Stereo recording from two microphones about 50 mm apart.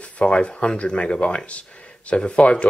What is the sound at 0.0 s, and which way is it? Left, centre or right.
Speech, left.